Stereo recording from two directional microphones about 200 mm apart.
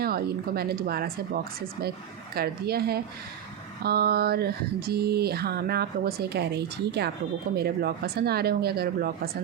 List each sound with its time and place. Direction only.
0.0 s speech: 50° right (ahead or behind)